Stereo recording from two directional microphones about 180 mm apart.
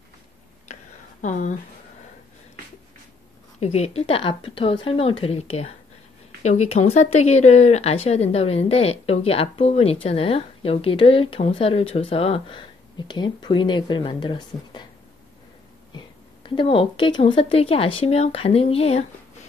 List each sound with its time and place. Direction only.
0.7 s a sound: 35° left (ahead or behind)
3.5 s speech: 35° left (ahead or behind)
16.4 s speech: 30° left (ahead or behind)